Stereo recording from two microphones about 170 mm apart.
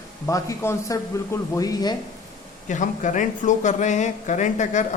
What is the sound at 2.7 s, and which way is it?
Speech, 45° left (ahead or behind).